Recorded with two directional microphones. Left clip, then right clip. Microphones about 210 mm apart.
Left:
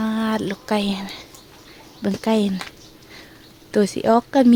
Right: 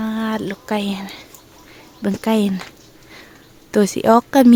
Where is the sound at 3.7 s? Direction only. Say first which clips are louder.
Right 3 dB; 25° right (ahead or behind).